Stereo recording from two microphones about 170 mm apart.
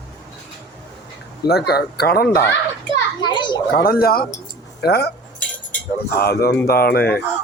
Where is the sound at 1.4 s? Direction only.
70° left (ahead or behind).